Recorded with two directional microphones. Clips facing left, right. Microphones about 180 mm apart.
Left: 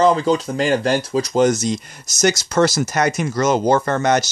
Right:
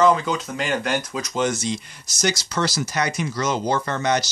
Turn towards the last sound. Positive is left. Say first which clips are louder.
# left 6 dB
turn(degrees=50)  # may be behind; listen again after turning